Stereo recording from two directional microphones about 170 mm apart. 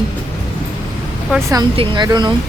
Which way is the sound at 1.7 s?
30° right (ahead or behind).